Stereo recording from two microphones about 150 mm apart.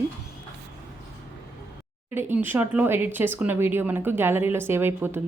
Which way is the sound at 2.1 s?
15° right (ahead or behind).